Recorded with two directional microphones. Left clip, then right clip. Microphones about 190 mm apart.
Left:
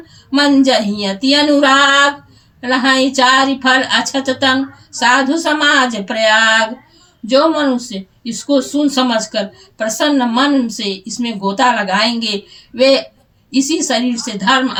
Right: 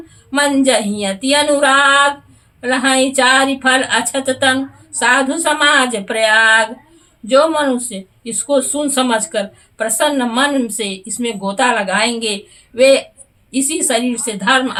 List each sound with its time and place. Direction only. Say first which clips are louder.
0.3 s speech: left 2 dB; 20° right (ahead or behind)